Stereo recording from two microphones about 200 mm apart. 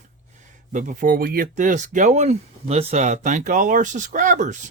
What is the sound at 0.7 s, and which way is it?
Speech, 40° right (ahead or behind).